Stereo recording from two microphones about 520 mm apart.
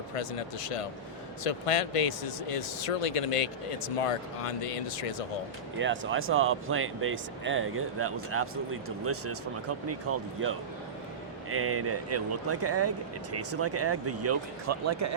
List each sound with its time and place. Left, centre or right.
0.1 s speech: left
5.8 s speech: right
11.5 s speech: right